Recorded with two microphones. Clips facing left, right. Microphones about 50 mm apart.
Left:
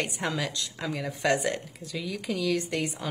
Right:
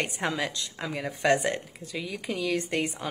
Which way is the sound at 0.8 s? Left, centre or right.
Centre.